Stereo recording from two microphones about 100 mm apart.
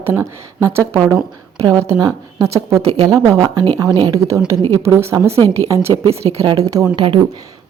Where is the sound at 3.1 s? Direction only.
40° right (ahead or behind).